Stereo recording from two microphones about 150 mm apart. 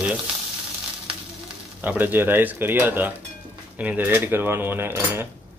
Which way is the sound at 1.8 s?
10° right (ahead or behind).